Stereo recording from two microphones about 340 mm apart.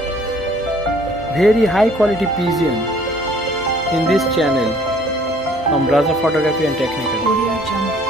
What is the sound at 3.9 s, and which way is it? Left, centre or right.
Speech, centre.